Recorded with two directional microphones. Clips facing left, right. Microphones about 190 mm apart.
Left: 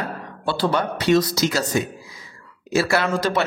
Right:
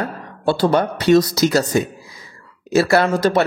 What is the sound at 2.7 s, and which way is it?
Speech, 40° right (ahead or behind).